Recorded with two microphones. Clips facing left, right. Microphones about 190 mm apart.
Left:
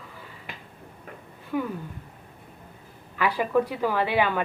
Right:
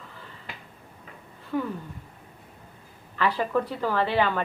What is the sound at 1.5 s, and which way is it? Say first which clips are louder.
Speech: even; 10° left (ahead or behind).